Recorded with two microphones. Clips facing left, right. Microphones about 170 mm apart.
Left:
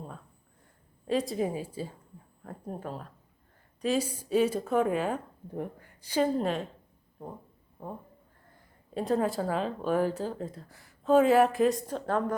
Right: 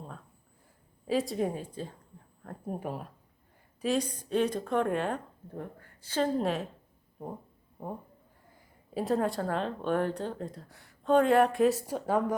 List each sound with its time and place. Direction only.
1.0 s speech: centre (ahead or behind)
2.7 s speech: 15° right (ahead or behind)
3.8 s speech: centre (ahead or behind)
5.5 s a woman's voice: 15° left (ahead or behind)
6.3 s speech: centre (ahead or behind)
7.8 s speech: 20° right (ahead or behind)
8.9 s speech: centre (ahead or behind)